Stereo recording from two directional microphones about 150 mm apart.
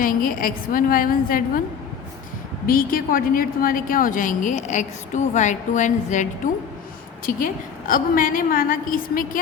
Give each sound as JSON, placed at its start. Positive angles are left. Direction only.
{"t": 0.0, "sound": "a woman's voice", "side_deg": 65}
{"t": 2.6, "sound": "a woman's voice", "side_deg": 70}
{"t": 7.3, "sound": "a woman's voice", "side_deg": 65}